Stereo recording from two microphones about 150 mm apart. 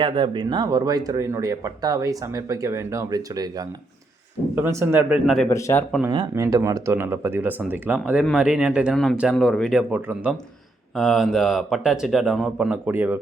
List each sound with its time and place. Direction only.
0.0 s speech: 35° right (ahead or behind); by 5.5 s centre (ahead or behind)
5.5 s speech: 20° left (ahead or behind)
6.1 s speech: 30° right (ahead or behind)